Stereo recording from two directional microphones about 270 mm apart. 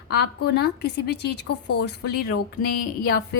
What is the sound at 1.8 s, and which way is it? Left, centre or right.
A woman's voice, left.